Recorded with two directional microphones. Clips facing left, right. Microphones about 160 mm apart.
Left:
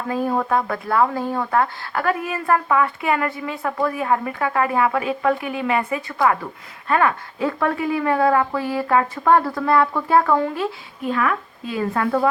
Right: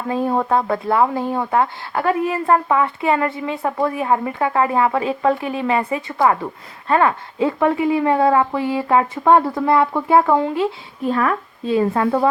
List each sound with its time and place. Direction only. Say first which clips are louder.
0.1 s speech: right 2 dB; 25° right (ahead or behind)
11.1 s speech: right 2 dB; 35° right (ahead or behind)